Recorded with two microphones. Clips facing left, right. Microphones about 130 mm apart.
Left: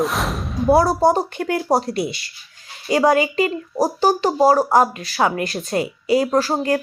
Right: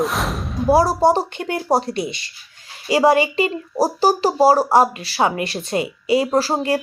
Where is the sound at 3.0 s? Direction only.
25° right (ahead or behind).